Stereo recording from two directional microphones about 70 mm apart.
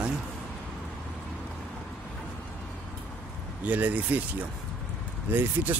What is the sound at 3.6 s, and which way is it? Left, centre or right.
Speech, right.